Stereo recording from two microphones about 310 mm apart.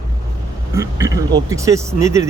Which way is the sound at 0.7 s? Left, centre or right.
Centre.